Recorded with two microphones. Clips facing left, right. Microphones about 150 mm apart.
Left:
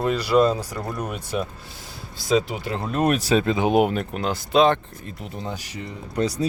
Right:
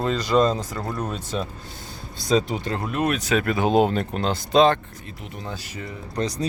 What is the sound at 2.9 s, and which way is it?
Speech, 40° left (ahead or behind).